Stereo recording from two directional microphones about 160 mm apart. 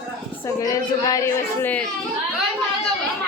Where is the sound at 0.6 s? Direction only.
20° left (ahead or behind).